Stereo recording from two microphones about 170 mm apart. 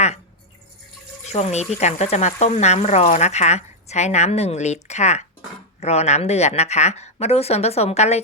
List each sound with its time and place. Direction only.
1.2 s speech: 40° left (ahead or behind)